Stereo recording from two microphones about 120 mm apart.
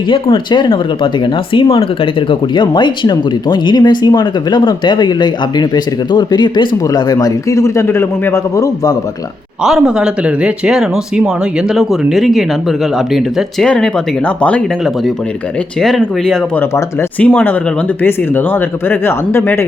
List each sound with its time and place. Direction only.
0.1 s speech: 40° left (ahead or behind)
9.6 s speech: 5° right (ahead or behind); by 14.6 s 10° left (ahead or behind)
15.8 s speech: 5° left (ahead or behind)
16.6 s speech: 15° left (ahead or behind)